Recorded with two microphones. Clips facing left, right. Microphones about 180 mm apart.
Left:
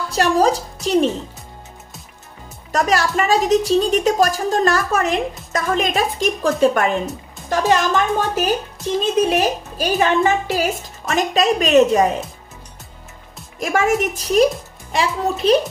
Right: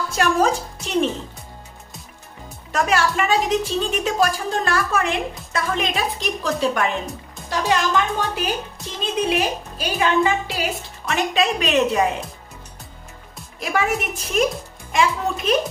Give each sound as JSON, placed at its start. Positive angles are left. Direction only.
{"t": 0.1, "sound": "speech", "side_deg": 35}
{"t": 2.7, "sound": "a woman's voice", "side_deg": 40}
{"t": 13.6, "sound": "a woman's voice", "side_deg": 45}